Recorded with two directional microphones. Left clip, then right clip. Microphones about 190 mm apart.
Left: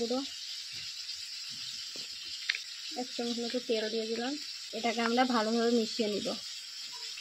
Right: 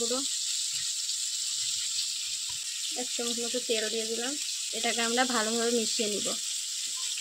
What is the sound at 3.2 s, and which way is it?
Speech, centre (ahead or behind).